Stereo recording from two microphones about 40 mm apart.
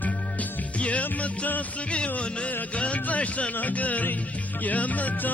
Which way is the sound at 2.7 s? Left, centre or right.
Left.